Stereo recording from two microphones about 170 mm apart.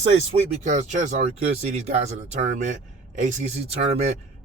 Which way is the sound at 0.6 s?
45° right (ahead or behind).